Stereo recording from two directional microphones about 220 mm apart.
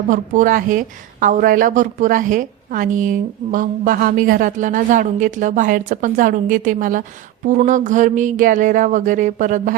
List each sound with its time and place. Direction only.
0.1 s a woman's voice: 35° right (ahead or behind)